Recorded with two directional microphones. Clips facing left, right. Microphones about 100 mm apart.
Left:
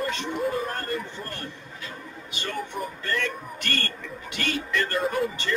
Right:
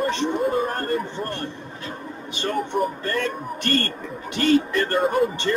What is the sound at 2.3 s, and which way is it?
Speech, 40° right (ahead or behind).